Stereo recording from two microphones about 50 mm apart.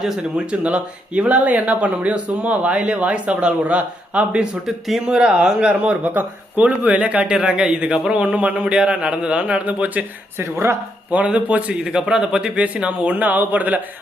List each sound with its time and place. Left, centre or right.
0.2 s speech: right
4.6 s speech: centre; by 10.1 s right
10.3 s a woman's voice: right
11.1 s speech: right